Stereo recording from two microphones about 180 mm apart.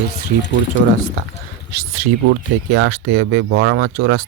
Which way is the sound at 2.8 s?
80° right.